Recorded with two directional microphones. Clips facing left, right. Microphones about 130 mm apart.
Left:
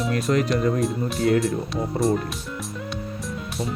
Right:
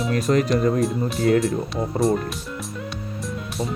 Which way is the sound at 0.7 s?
Centre (ahead or behind).